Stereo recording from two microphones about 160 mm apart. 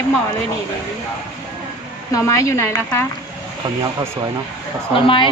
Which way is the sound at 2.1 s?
20° left (ahead or behind).